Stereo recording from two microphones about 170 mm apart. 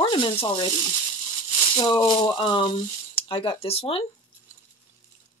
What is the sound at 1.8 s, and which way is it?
Speech, 25° left (ahead or behind).